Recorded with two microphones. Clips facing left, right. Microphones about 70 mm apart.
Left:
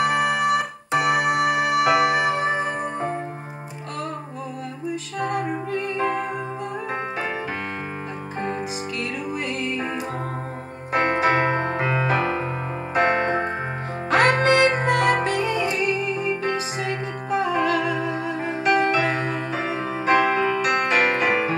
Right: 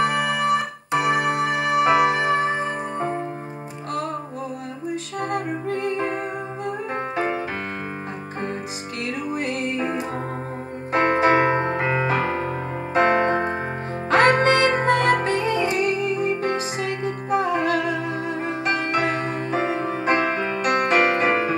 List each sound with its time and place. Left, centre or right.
0.1 s keyboard: left
0.5 s keyboard: right
1.4 s music: left
1.7 s music: right
2.4 s music: left
5.2 s music: right
9.3 s music: right
10.9 s piano: right
12.9 s music: right
15.7 s music: right
17.9 s music: left
18.4 s music: right